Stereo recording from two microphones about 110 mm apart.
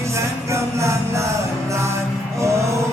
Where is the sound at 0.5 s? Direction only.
25° right (ahead or behind).